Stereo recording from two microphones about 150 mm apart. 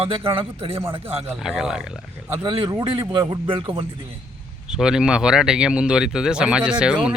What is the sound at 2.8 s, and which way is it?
A man's voice, 35° right (ahead or behind).